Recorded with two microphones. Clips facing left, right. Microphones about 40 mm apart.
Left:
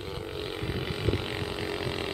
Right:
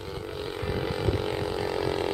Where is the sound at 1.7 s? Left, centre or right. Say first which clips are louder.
Right 5 dB; left.